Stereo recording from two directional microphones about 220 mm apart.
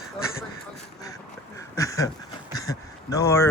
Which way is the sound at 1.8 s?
15° left (ahead or behind).